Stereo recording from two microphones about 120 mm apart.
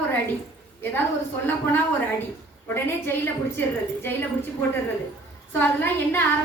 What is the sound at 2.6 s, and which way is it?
A woman's voice, 15° left (ahead or behind).